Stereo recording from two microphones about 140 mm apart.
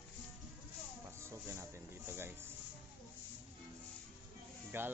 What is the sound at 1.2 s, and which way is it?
Music, 20° right (ahead or behind).